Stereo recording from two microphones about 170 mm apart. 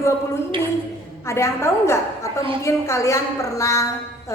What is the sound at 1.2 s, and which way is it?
A woman's voice, 15° left (ahead or behind).